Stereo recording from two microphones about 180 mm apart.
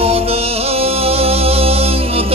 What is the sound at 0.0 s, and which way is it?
Music, 35° right (ahead or behind).